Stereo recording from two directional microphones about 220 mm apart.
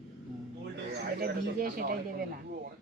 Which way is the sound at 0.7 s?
45° right (ahead or behind).